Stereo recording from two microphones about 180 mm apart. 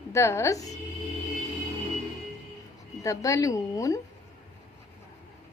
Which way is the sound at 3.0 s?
15° left (ahead or behind).